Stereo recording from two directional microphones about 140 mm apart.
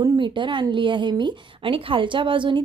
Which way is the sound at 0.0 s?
30° right (ahead or behind).